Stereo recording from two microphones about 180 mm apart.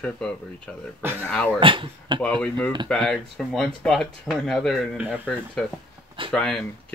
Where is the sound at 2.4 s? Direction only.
5° left (ahead or behind).